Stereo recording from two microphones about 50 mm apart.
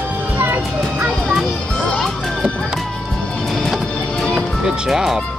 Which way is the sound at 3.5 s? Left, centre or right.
Centre.